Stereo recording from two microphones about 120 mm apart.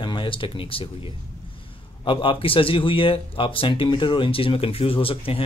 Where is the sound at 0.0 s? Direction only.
40° left (ahead or behind).